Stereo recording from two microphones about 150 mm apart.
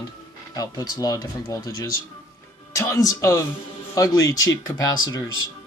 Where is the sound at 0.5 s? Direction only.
25° left (ahead or behind).